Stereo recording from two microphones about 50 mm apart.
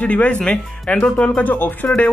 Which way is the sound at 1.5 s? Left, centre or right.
Left.